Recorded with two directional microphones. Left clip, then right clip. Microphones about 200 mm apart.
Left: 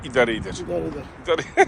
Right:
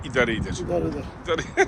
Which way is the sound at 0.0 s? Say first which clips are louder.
Left 3 dB; 5° right (ahead or behind).